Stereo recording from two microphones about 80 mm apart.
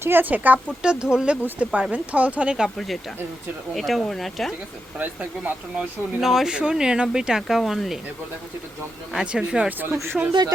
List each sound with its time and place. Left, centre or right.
0.0 s speech: right
2.6 s speech: centre
4.9 s speech: right
6.1 s speech: centre
9.1 s speech: centre
9.9 s speech: right